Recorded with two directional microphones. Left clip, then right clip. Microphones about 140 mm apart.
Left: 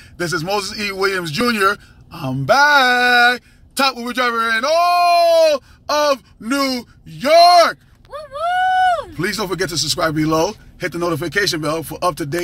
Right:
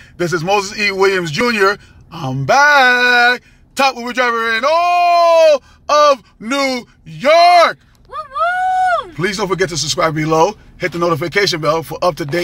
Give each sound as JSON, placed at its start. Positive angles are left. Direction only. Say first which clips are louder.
{"t": 0.2, "sound": "speech", "louder": "right 5 dB", "side_deg": -25}
{"t": 8.1, "sound": "a sound", "louder": "right 3 dB", "side_deg": 20}
{"t": 9.1, "sound": "speech", "louder": "right 4 dB", "side_deg": -25}